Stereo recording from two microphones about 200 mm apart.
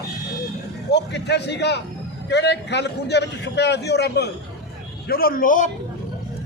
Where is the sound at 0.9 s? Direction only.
60° left (ahead or behind); by 5.7 s 40° left (ahead or behind).